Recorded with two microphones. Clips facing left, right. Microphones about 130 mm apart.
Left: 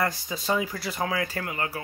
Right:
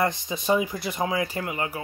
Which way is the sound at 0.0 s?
20° right (ahead or behind).